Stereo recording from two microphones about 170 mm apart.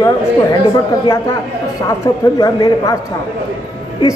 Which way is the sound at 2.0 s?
20° left (ahead or behind).